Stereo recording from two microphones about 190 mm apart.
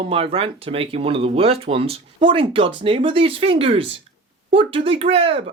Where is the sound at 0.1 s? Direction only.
30° right (ahead or behind).